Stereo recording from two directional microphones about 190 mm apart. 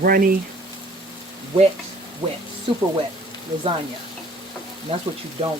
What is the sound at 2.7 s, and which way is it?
Speech, 25° right (ahead or behind).